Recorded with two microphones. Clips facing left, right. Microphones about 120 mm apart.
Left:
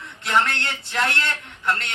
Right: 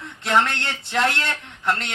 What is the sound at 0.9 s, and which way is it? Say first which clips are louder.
Speech: right 2 dB; 30° right (ahead or behind).